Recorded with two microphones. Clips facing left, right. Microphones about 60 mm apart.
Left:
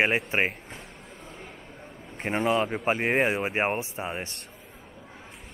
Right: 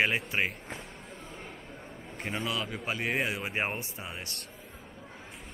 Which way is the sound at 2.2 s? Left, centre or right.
Left.